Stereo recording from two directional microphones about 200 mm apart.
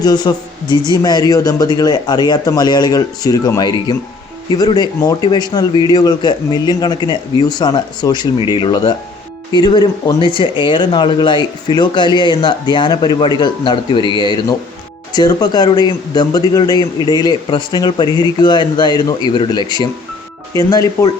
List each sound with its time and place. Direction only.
0.0 s speech: 20° left (ahead or behind)